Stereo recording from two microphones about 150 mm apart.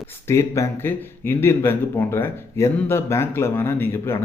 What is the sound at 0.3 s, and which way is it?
Speech, 20° left (ahead or behind).